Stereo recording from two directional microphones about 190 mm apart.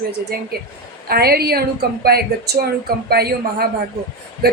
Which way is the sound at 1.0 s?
55° right (ahead or behind).